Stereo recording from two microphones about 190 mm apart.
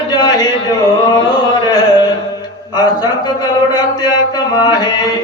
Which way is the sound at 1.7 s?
20° left (ahead or behind).